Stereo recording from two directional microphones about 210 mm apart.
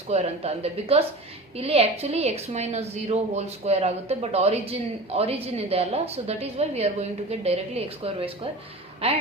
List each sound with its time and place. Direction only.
0.1 s a woman's voice: 30° right (ahead or behind)